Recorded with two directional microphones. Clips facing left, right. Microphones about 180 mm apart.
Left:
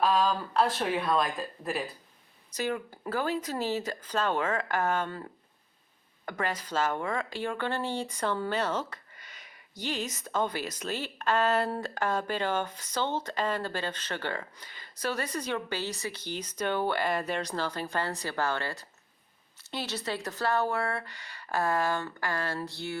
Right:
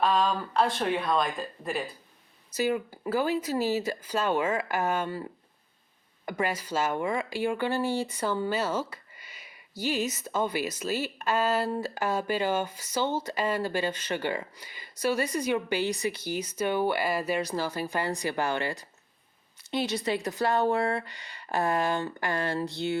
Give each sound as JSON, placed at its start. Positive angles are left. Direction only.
{"t": 0.0, "sound": "speech", "side_deg": 0}